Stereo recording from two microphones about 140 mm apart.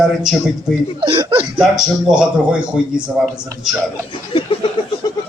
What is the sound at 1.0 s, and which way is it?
Speech, 40° right (ahead or behind).